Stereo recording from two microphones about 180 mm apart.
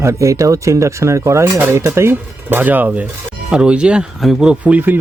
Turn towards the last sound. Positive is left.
turn(degrees=-10)  # may be behind; listen again after turning